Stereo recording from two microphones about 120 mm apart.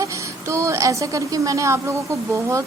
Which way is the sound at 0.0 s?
25° right (ahead or behind).